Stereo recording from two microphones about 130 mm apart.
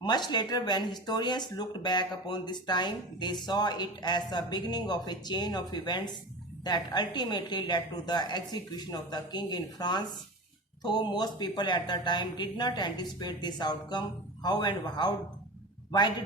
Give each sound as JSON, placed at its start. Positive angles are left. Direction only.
{"t": 0.3, "sound": "speech", "side_deg": 30}